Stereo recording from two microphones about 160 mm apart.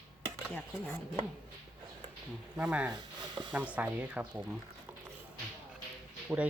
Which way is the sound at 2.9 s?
25° right (ahead or behind).